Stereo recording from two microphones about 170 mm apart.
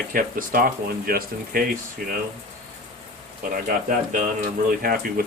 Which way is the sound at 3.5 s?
50° right (ahead or behind).